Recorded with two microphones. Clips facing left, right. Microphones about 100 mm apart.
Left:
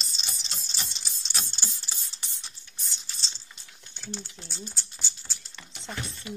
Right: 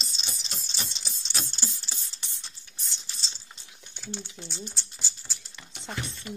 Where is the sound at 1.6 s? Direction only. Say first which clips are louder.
Right 2 dB; 15° left (ahead or behind).